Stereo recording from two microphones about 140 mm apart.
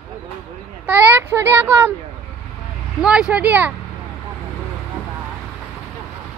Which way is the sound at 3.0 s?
5° right (ahead or behind).